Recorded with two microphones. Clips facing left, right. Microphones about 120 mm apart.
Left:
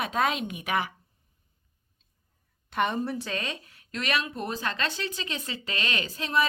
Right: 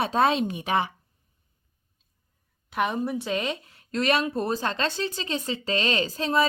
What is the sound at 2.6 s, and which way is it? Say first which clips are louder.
Speech: right 1 dB; 5° right (ahead or behind).